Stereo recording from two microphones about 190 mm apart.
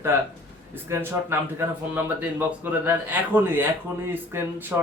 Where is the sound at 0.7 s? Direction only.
15° right (ahead or behind).